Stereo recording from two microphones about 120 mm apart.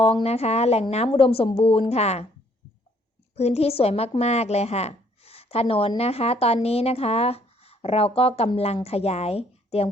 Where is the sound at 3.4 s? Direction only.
60° left (ahead or behind).